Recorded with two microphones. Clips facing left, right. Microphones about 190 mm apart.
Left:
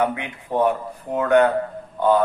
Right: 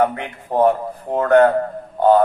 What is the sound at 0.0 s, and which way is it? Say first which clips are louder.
A man's voice: right 4 dB; 40° right (ahead or behind).